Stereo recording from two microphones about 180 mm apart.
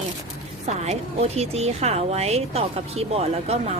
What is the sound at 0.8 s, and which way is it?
A woman's voice, 35° right (ahead or behind).